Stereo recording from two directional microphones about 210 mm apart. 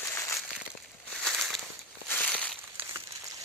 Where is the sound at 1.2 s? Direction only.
Centre (ahead or behind).